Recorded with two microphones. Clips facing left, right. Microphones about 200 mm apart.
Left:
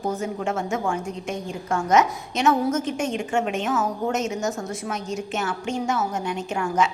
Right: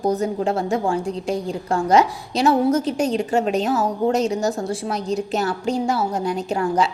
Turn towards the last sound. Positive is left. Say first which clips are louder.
# right 3 dB
turn(degrees=-35)  # may be behind; listen again after turning